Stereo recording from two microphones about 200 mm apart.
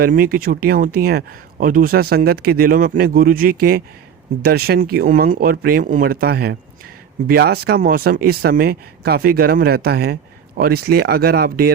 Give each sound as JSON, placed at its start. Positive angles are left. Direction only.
{"t": 0.0, "sound": "speech", "side_deg": -45}